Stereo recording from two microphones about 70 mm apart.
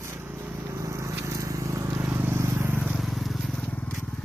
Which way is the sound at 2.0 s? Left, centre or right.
Right.